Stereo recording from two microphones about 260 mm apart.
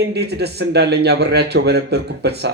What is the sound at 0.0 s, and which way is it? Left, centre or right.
Speech, right.